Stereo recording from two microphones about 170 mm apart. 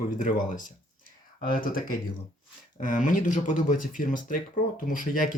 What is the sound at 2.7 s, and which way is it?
Speech, 50° left (ahead or behind).